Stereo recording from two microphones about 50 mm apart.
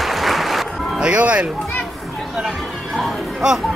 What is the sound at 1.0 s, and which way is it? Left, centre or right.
Speech, right.